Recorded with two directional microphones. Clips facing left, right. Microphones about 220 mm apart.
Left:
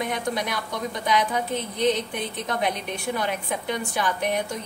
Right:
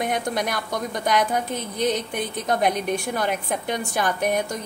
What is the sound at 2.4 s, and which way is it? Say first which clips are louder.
A woman's voice: right 6 dB; 45° right (ahead or behind).